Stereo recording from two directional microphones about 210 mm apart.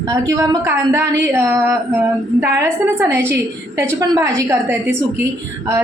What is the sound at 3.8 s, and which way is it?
A woman's voice, 15° right (ahead or behind).